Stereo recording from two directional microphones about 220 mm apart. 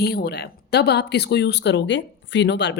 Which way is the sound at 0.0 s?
45° left (ahead or behind).